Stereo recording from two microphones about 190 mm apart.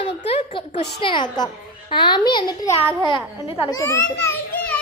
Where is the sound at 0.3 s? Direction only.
30° left (ahead or behind).